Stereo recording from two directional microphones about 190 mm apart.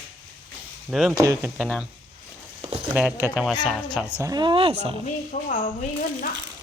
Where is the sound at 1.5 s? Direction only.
5° left (ahead or behind).